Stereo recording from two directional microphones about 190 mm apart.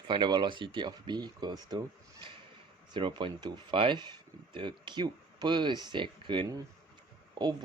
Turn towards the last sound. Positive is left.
turn(degrees=-20)  # may be behind; listen again after turning